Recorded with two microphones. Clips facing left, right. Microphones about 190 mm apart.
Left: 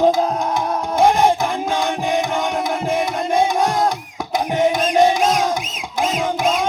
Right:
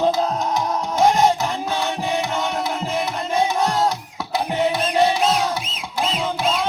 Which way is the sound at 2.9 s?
15° left (ahead or behind).